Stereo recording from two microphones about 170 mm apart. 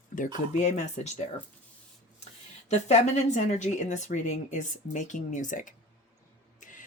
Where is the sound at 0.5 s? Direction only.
40° left (ahead or behind).